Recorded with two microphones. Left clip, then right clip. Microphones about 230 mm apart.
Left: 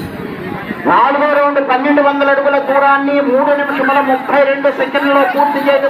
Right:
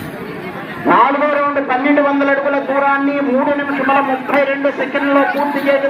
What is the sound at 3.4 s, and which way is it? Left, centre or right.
A man's voice, left.